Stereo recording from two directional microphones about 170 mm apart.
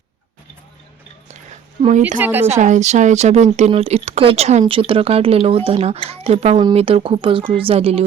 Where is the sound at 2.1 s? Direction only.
10° right (ahead or behind).